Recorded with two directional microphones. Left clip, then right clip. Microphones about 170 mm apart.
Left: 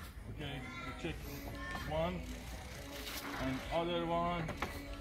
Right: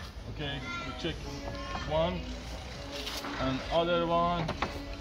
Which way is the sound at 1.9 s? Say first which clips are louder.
Right 8 dB; 20° right (ahead or behind).